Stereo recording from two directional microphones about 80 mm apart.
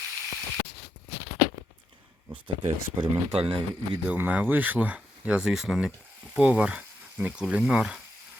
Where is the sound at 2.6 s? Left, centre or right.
Right.